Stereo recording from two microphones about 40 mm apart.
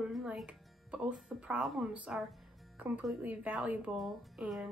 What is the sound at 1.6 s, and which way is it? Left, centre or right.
Speech, centre.